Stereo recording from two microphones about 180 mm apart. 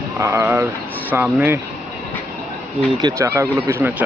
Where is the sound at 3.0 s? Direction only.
15° right (ahead or behind).